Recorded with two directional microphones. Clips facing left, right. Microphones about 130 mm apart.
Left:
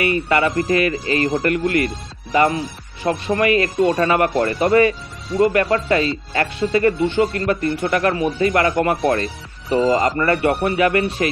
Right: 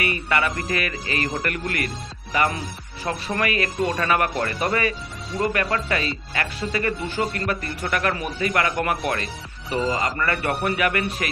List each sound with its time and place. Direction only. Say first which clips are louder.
0.0 s speech: left 6 dB; 25° left (ahead or behind)